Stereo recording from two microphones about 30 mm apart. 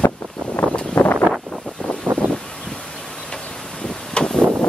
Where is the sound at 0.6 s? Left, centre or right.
Left.